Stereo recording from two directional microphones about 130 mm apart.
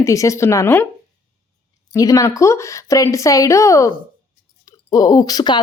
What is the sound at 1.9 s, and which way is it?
Speech, 25° left (ahead or behind).